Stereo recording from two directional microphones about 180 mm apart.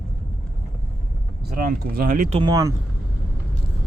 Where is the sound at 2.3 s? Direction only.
25° right (ahead or behind).